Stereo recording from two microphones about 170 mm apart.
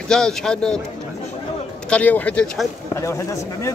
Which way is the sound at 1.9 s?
10° left (ahead or behind).